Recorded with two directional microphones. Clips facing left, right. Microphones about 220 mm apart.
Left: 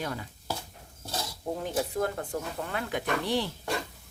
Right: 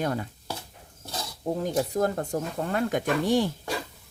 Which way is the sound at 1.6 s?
40° right (ahead or behind).